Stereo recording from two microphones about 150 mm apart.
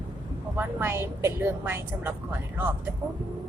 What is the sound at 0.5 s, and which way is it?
A woman's voice, 15° right (ahead or behind).